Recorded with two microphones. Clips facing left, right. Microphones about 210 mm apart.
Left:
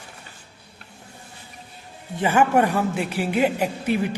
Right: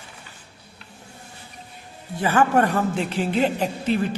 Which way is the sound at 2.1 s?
15° left (ahead or behind).